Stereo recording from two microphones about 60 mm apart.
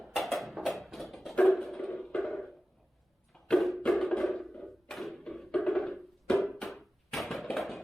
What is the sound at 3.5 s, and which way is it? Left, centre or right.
Music, centre.